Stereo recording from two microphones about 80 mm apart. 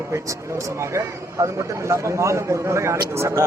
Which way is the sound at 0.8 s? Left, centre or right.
Right.